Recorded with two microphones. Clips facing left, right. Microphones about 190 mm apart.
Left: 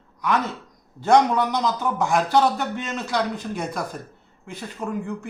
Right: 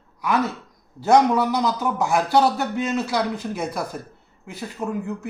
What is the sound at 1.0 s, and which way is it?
Speech, 5° right (ahead or behind).